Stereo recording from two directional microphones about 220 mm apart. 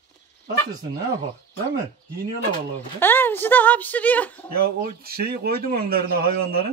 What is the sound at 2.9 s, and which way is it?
Speech, 10° left (ahead or behind).